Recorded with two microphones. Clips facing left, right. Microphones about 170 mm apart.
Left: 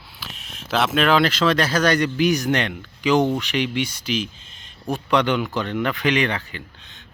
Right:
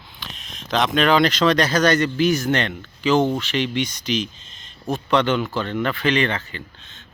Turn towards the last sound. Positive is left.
turn(degrees=10)  # may be behind; listen again after turning